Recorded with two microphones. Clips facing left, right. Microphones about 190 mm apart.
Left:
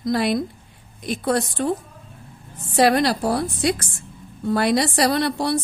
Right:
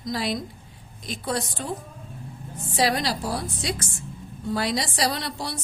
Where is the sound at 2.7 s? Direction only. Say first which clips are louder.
Left 7 dB; 60° left (ahead or behind).